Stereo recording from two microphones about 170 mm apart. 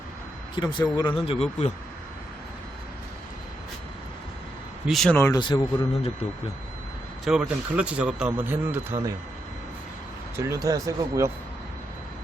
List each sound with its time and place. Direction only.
0.5 s a man's voice: 25° left (ahead or behind)
4.9 s speech: 5° left (ahead or behind)
5.3 s a man's voice: 25° left (ahead or behind)
7.3 s speech: 5° right (ahead or behind)
10.3 s speech: 15° right (ahead or behind)